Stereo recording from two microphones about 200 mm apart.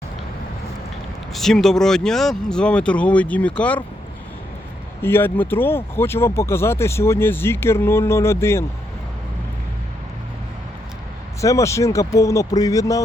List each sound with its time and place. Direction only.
1.3 s speech: centre (ahead or behind)
5.0 s speech: 10° left (ahead or behind)
11.3 s speech: 15° left (ahead or behind)